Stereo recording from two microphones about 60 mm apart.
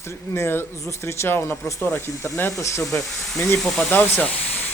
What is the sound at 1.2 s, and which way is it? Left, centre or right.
Speech, left.